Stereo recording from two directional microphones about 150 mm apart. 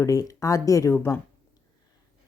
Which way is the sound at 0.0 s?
20° left (ahead or behind).